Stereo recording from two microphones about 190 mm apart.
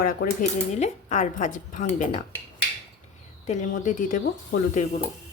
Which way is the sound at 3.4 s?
40° left (ahead or behind).